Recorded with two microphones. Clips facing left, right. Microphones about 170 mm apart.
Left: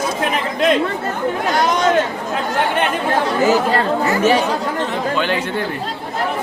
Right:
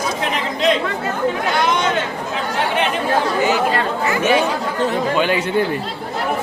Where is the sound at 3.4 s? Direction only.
40° left (ahead or behind).